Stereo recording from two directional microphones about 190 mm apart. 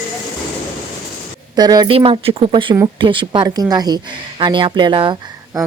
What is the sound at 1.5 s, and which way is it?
A woman's voice, 20° right (ahead or behind).